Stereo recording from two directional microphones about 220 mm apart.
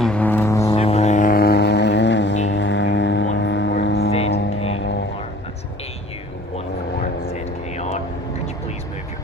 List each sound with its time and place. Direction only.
0.0 s foghorn: 5° left (ahead or behind)
0.8 s vehicle: 30° left (ahead or behind); by 2.3 s 55° left (ahead or behind)
2.5 s didgeridoo: 55° left (ahead or behind)
3.3 s vehicle: 55° left (ahead or behind)
4.3 s music: 50° left (ahead or behind)
7.8 s vehicle: 30° left (ahead or behind)